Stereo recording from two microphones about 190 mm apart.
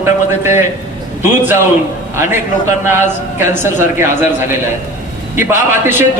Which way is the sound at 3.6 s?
10° right (ahead or behind).